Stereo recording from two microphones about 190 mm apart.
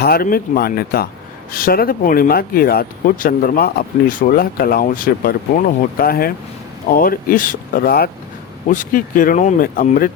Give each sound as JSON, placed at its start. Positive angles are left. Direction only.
{"t": 0.0, "sound": "speech", "side_deg": 50}
{"t": 8.6, "sound": "speech", "side_deg": 45}